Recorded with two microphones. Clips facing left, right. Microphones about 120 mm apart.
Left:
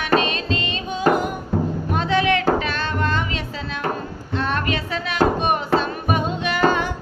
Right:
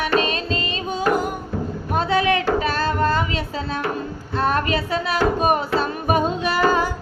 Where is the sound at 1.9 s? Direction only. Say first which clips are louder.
Right 1 dB; 35° right (ahead or behind).